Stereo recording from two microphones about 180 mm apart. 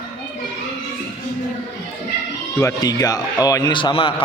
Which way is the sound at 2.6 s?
20° left (ahead or behind).